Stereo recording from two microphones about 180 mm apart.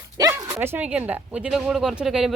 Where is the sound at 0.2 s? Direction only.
20° right (ahead or behind).